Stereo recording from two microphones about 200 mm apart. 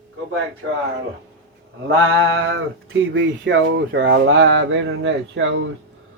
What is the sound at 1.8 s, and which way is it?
Speech, 85° right.